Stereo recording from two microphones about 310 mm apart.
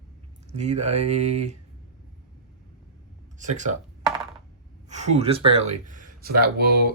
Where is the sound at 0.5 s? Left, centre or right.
Right.